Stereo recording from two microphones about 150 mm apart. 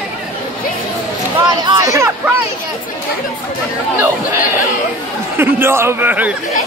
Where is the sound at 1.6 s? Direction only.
25° right (ahead or behind).